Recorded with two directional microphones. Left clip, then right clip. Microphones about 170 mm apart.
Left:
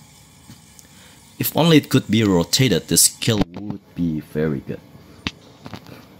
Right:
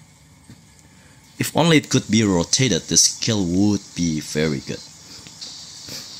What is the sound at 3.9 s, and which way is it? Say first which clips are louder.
Speech: right 1 dB; 35° right (ahead or behind).